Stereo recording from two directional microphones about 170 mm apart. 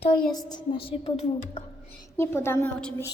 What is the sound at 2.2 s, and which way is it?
Speech, 15° left (ahead or behind).